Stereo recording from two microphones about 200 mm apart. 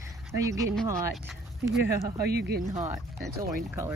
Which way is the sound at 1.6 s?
15° right (ahead or behind).